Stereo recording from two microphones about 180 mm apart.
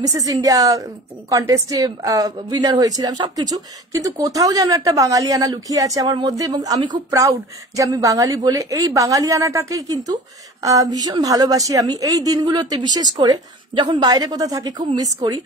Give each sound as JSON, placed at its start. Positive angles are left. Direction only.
{"t": 0.0, "sound": "a woman's voice", "side_deg": -20}